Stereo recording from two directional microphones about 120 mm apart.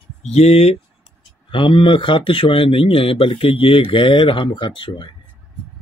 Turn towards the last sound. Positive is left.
turn(degrees=40)  # may be behind; listen again after turning